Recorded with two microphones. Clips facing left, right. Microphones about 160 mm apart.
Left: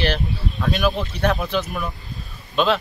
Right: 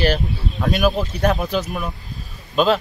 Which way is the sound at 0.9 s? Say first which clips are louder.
Right 2 dB; 40° right (ahead or behind).